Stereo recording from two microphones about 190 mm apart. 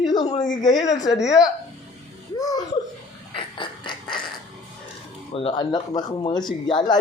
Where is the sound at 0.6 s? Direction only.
20° left (ahead or behind).